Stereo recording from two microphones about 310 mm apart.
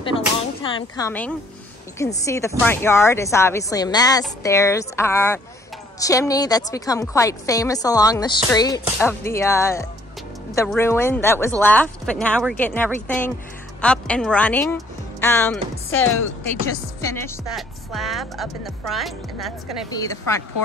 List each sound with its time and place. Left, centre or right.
0.0 s a sound: centre
2.0 s a woman's voice: centre
17.1 s speech: centre
19.9 s a woman's voice: centre